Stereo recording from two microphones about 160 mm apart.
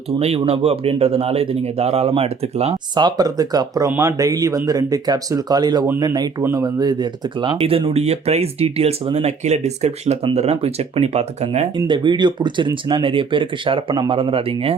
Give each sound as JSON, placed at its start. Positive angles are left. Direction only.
{"t": 0.2, "sound": "speech", "side_deg": -40}
{"t": 2.9, "sound": "speech", "side_deg": -25}
{"t": 11.8, "sound": "speech", "side_deg": -30}